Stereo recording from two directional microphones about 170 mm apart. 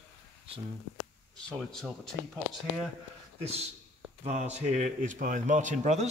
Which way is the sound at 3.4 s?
35° right (ahead or behind).